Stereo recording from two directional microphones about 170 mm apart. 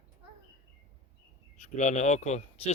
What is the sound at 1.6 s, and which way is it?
Speech, 45° left (ahead or behind).